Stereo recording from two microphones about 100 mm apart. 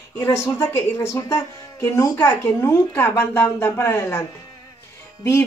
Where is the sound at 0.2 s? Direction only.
25° left (ahead or behind).